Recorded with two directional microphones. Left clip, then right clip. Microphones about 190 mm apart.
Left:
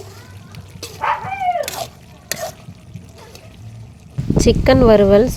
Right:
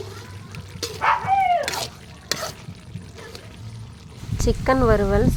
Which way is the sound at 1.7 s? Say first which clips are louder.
Left 1 dB; 20° right (ahead or behind).